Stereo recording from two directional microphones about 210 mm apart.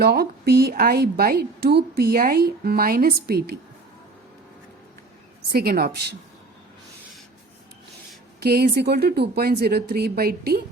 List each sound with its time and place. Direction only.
0.0 s a woman's voice: 50° right (ahead or behind)
5.5 s a woman's voice: 45° right (ahead or behind)
8.4 s a woman's voice: 50° right (ahead or behind)